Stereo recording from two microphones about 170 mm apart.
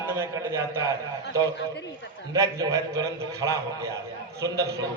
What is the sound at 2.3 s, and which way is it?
A man's voice, 20° right (ahead or behind).